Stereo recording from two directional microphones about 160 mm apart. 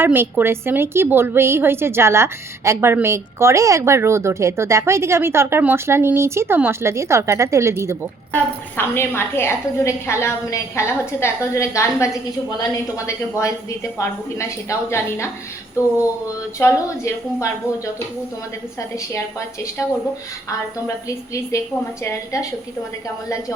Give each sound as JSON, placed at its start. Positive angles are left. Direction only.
{"t": 0.0, "sound": "a woman's voice", "side_deg": -15}
{"t": 8.3, "sound": "a woman's voice", "side_deg": 10}
{"t": 16.6, "sound": "a woman's voice", "side_deg": 15}
{"t": 22.0, "sound": "a woman's voice", "side_deg": 20}